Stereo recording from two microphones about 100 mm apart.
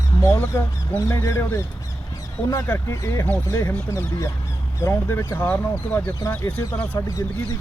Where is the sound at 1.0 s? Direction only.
30° left (ahead or behind).